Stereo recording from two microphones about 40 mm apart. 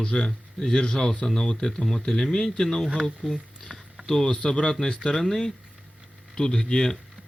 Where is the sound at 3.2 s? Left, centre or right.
Centre.